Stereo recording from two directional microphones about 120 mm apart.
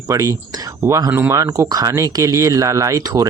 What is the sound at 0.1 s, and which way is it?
Speech, 25° right (ahead or behind).